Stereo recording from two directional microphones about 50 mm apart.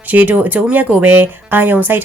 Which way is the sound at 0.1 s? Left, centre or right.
Right.